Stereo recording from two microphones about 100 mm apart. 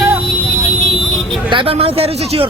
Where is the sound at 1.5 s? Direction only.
55° right (ahead or behind).